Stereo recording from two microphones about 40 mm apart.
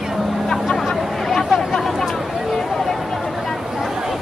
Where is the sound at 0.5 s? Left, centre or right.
Centre.